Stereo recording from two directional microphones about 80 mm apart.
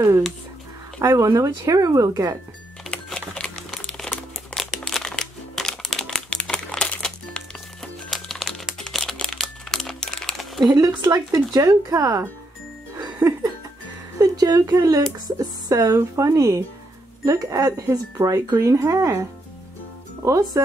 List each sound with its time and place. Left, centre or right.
1.0 s speech: right
2.9 s crumpling: centre
8.1 s music: centre
8.7 s crumpling: centre
10.6 s speech: right
14.1 s speech: right
20.2 s speech: right